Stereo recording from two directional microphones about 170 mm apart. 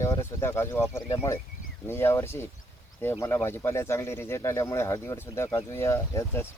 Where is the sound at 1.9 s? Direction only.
15° left (ahead or behind).